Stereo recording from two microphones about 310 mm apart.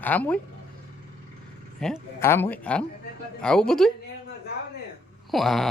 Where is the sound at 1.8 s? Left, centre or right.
Centre.